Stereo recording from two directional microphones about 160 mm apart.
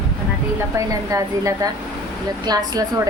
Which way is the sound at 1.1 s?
20° right (ahead or behind).